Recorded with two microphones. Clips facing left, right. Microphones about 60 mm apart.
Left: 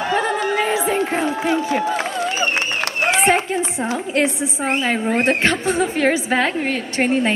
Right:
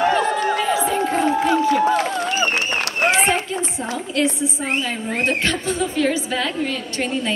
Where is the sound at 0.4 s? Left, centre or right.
Left.